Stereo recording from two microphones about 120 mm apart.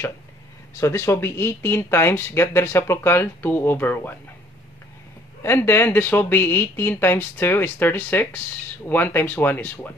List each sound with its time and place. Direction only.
0.7 s speech: 25° left (ahead or behind)
5.4 s speech: 20° left (ahead or behind)